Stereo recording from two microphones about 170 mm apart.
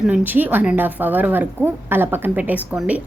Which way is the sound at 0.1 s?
10° right (ahead or behind).